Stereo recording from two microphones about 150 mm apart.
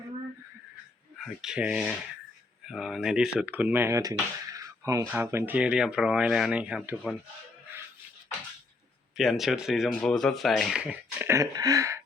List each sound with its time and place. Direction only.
1.2 s speech: 5° right (ahead or behind)
9.1 s speech: centre (ahead or behind)
11.3 s a sound: 25° right (ahead or behind)